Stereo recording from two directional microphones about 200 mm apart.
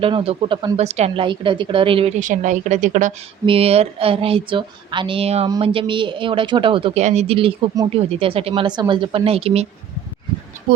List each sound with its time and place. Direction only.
0.0 s speech: 25° right (ahead or behind)
3.4 s speech: 30° right (ahead or behind)